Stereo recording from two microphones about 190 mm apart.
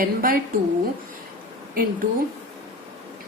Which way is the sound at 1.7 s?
50° right (ahead or behind).